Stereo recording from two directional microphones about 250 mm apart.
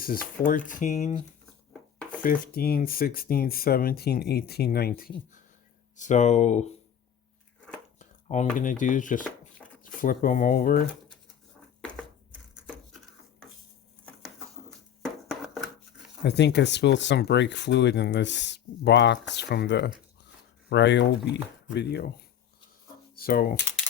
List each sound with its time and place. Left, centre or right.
0.0 s speech: left
2.2 s speech: left
7.9 s speech: left
11.9 s a sound: centre
15.3 s a sound: centre
16.2 s speech: left
23.1 s speech: left